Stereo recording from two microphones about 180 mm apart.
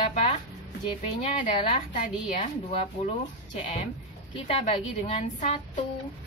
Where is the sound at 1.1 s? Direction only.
40° left (ahead or behind).